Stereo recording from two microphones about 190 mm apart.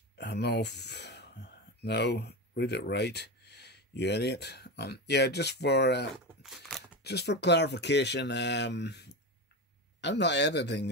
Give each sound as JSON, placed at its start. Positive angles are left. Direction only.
{"t": 0.2, "sound": "speech", "side_deg": 60}
{"t": 6.4, "sound": "a sound", "side_deg": 0}
{"t": 7.0, "sound": "speech", "side_deg": 60}